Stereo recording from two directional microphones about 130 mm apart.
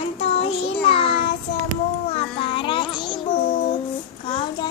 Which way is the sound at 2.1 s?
50° left (ahead or behind).